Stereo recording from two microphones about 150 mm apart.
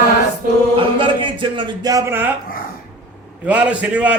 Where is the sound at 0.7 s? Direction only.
35° right (ahead or behind); by 2.3 s 15° right (ahead or behind).